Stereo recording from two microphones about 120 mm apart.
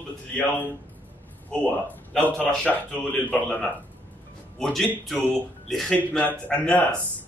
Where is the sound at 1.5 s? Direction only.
15° left (ahead or behind).